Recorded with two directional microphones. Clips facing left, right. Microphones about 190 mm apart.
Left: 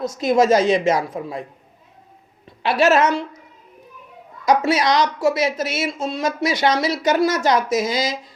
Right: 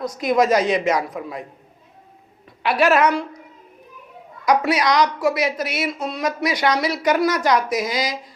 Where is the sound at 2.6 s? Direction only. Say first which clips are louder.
Left 1 dB; 25° left (ahead or behind).